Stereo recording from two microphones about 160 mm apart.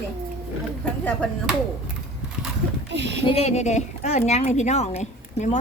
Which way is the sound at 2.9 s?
90° right.